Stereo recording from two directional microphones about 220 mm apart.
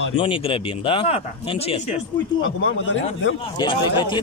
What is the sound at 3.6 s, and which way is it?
Speech, 20° left (ahead or behind).